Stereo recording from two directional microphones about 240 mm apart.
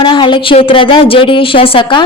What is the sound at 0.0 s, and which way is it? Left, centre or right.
A woman's voice, left.